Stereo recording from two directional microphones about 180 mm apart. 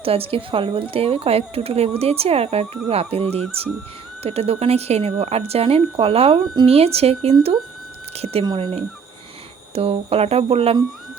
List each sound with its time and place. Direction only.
0.0 s speech: 30° right (ahead or behind)